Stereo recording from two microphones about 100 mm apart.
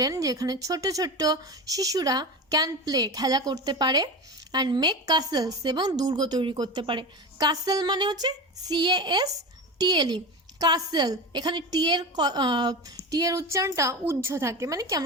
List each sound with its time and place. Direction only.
0.0 s a woman's voice: 35° right (ahead or behind)